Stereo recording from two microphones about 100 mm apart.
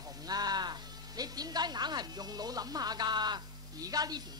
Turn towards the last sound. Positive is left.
turn(degrees=-40)  # may be behind; listen again after turning